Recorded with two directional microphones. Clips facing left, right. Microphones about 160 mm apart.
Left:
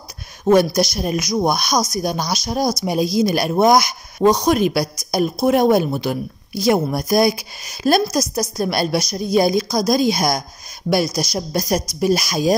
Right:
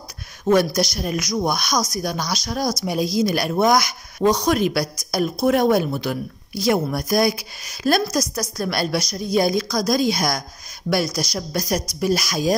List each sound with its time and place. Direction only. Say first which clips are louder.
0.5 s a woman's voice: left 3 dB; 20° left (ahead or behind)
11.3 s a woman's voice: left 4 dB; 25° left (ahead or behind)